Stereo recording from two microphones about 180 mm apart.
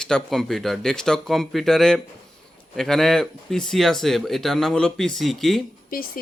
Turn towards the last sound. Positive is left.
turn(degrees=55)  # may be behind; listen again after turning